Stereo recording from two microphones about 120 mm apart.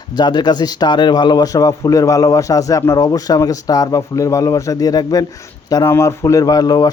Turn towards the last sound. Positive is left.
turn(degrees=30)  # may be behind; listen again after turning